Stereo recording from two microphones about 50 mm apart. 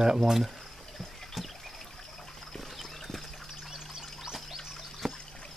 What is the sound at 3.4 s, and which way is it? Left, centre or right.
Trickle, centre.